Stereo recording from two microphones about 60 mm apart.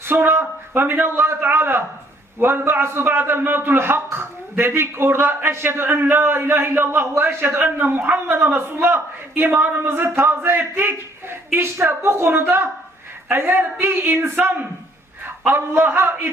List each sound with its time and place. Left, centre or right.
0.0 s a man's voice: right
15.4 s a man's voice: right